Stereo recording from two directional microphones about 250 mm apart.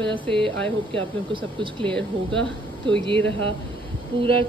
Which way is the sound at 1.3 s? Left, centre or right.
Centre.